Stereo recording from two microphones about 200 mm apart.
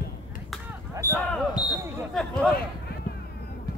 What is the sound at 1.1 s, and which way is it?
Basketball bounce, 5° left (ahead or behind).